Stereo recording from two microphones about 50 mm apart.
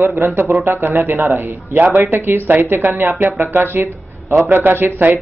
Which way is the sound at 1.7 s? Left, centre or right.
Right.